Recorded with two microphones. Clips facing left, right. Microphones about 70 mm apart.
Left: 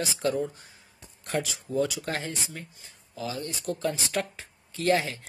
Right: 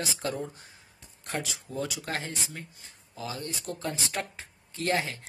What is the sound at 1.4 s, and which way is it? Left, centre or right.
Speech, right.